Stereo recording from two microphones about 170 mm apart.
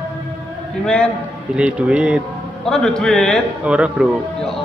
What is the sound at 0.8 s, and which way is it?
Speech, 5° left (ahead or behind).